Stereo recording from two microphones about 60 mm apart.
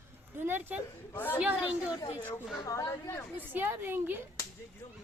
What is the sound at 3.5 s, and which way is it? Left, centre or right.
Speech, right.